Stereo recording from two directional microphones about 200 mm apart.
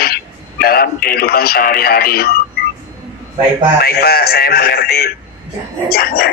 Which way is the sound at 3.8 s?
50° left (ahead or behind).